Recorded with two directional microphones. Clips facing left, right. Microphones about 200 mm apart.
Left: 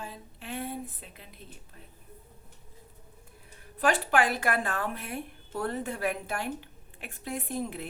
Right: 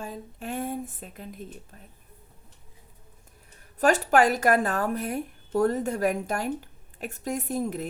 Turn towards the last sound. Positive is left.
turn(degrees=-45)  # may be behind; listen again after turning